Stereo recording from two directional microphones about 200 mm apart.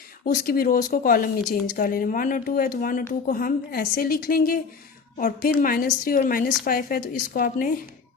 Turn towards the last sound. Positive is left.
turn(degrees=45)  # may be behind; listen again after turning